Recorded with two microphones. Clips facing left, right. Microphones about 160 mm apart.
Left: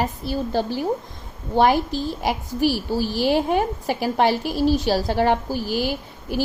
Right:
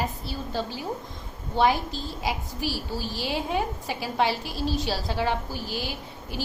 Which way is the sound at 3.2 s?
50° left (ahead or behind).